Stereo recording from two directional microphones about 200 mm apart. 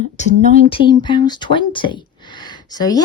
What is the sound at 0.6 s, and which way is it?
Speech, 25° left (ahead or behind).